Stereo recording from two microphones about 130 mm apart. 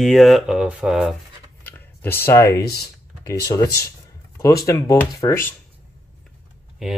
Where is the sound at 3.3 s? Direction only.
25° left (ahead or behind).